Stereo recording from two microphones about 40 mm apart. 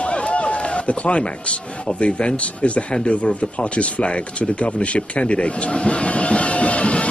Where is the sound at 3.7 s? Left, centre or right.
Left.